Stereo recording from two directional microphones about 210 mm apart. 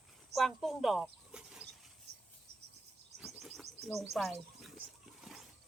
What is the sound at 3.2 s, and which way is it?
Bird, centre (ahead or behind).